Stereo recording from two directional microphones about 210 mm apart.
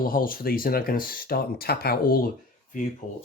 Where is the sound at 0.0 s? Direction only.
45° left (ahead or behind).